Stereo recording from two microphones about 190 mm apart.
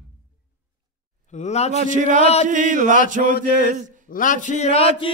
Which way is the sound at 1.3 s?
35° left (ahead or behind).